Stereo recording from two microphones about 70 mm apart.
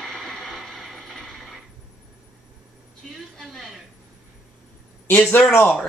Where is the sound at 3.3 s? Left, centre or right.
Centre.